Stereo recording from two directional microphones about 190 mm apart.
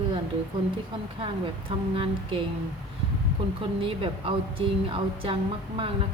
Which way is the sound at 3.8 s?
30° right (ahead or behind).